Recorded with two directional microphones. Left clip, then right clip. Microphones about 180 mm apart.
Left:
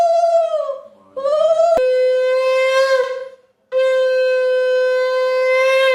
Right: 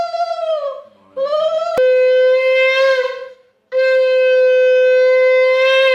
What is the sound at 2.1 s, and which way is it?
Shofar, 65° left (ahead or behind).